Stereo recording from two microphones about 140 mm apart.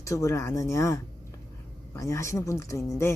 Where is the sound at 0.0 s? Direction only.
20° left (ahead or behind).